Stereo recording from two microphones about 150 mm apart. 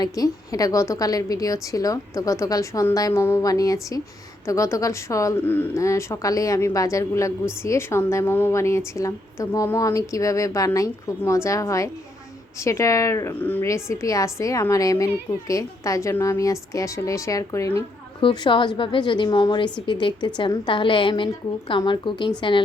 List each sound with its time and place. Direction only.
0.0 s a woman's voice: 25° left (ahead or behind)
18.2 s a woman's voice: 35° left (ahead or behind)